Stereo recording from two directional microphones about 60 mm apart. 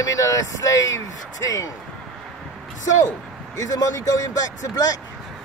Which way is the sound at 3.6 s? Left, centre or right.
Left.